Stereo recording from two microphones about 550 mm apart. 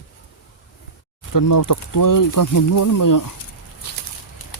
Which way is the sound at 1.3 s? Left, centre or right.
Left.